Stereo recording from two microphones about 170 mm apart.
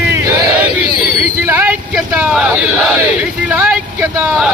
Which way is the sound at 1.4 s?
10° right (ahead or behind).